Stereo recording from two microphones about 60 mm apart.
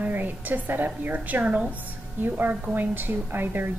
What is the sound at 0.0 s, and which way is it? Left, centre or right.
A woman's voice, right.